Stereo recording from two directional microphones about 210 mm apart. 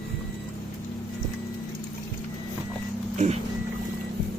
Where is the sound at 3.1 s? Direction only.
35° right (ahead or behind).